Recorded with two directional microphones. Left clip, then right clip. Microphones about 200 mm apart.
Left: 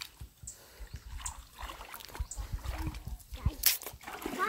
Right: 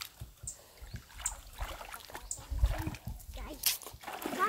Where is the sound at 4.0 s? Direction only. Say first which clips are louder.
Right 1 dB; centre (ahead or behind).